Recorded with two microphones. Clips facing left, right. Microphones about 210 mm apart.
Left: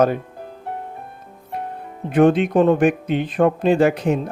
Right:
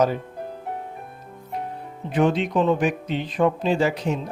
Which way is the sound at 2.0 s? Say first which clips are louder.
Left 6 dB; 55° left (ahead or behind).